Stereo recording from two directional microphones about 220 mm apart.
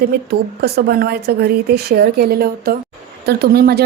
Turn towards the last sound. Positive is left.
turn(degrees=-45)  # may be behind; listen again after turning